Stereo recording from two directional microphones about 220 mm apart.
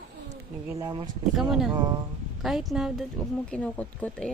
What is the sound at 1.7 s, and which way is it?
Speech, 20° right (ahead or behind).